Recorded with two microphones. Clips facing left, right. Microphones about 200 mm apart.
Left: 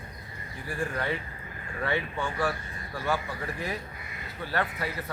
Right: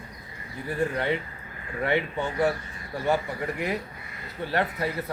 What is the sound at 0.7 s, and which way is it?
Speech, 25° right (ahead or behind).